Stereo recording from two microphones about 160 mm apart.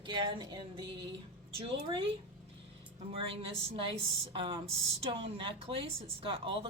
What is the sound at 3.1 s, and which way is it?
A woman's voice, 35° right (ahead or behind).